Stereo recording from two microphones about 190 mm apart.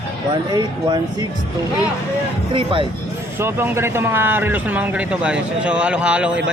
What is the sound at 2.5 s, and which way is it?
Speech, 25° right (ahead or behind).